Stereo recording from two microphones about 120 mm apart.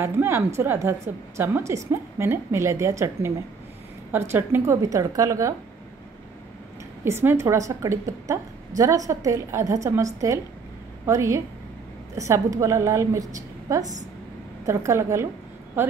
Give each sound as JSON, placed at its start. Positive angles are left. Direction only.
{"t": 0.0, "sound": "a woman's voice", "side_deg": -20}
{"t": 7.1, "sound": "a woman's voice", "side_deg": -20}
{"t": 11.1, "sound": "a woman's voice", "side_deg": -25}